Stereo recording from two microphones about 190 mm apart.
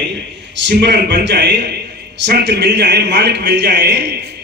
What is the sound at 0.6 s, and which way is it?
A man's voice, 70° right (ahead or behind).